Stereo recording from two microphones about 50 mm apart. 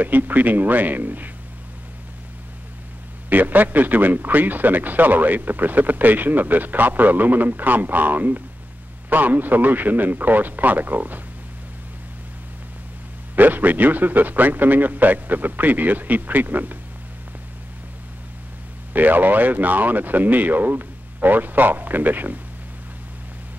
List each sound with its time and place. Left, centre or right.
0.0 s a man's voice: right
3.3 s a man's voice: right
13.4 s a man's voice: right
18.9 s a man's voice: right